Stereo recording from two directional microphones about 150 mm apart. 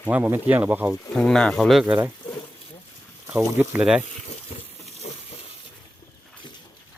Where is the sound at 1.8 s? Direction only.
10° right (ahead or behind).